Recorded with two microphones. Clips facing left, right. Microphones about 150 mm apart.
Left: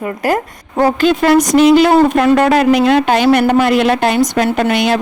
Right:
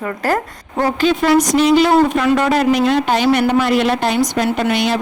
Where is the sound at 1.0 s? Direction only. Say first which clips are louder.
Left 1 dB; 55° left (ahead or behind).